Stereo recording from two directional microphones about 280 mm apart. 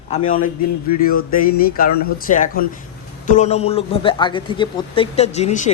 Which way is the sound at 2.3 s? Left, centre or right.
Left.